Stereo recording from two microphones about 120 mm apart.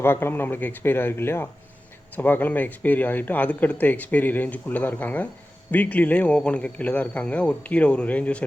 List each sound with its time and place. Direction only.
0.0 s speech: 20° left (ahead or behind)